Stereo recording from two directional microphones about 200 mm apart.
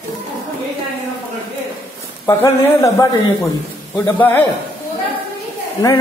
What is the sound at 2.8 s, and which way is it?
A man's voice, 15° left (ahead or behind).